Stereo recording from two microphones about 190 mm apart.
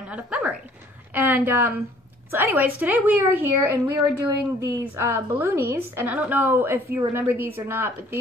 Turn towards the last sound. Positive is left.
turn(degrees=-10)  # may be behind; listen again after turning